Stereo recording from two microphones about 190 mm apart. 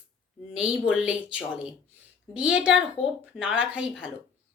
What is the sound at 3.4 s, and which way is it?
Speech, 5° right (ahead or behind).